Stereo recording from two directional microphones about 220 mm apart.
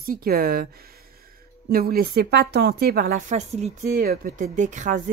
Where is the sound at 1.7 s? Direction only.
45° right (ahead or behind).